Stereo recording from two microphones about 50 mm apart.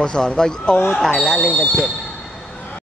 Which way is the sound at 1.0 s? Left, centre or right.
Centre.